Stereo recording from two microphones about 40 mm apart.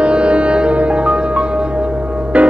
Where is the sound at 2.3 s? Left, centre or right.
Right.